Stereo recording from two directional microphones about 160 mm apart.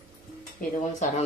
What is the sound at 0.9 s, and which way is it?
Speech, 50° left (ahead or behind).